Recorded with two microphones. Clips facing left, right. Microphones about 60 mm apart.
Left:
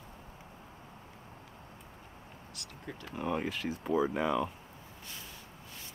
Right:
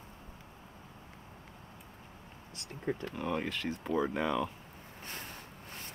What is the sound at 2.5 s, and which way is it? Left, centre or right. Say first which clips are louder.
Speech: right 9 dB; right.